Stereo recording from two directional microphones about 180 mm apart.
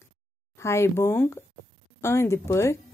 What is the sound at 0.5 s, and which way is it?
A woman's voice, 15° left (ahead or behind).